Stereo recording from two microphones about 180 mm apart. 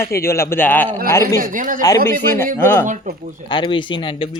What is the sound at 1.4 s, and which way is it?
Speech, 50° right (ahead or behind).